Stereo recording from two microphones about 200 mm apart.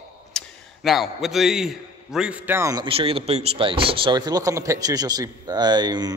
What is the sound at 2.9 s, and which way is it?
Speech, 30° right (ahead or behind).